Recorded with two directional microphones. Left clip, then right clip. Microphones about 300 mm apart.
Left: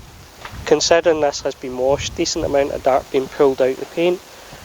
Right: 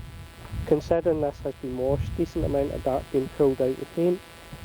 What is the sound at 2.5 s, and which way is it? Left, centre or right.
Speech, centre.